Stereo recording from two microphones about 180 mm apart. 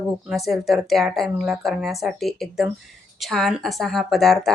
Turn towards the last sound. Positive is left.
turn(degrees=0)  # may be behind; listen again after turning